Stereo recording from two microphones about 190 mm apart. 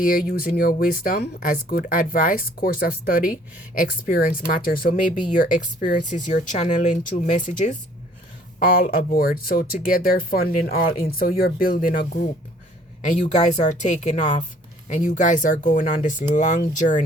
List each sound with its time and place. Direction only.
0.0 s speech: 50° left (ahead or behind)